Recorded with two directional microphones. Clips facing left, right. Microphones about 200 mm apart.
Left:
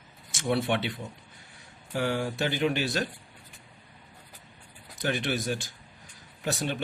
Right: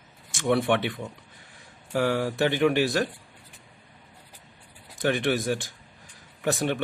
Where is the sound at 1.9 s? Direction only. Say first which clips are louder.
Right 4 dB; 80° right; by 2.8 s 60° right (ahead or behind).